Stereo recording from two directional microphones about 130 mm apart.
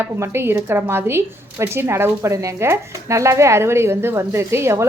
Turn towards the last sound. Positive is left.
turn(degrees=-20)  # may be behind; listen again after turning